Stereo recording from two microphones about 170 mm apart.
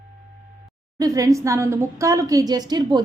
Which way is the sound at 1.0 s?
20° right (ahead or behind).